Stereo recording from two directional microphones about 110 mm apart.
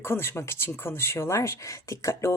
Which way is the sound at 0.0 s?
25° left (ahead or behind).